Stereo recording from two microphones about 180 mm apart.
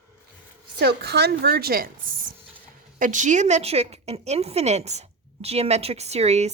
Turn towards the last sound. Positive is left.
turn(degrees=-35)  # may be behind; listen again after turning